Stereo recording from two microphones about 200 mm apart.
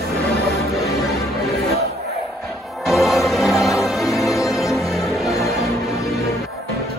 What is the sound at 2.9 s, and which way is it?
Music, centre (ahead or behind).